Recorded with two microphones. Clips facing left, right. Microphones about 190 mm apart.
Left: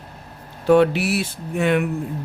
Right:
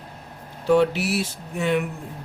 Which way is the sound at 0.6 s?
60° left (ahead or behind).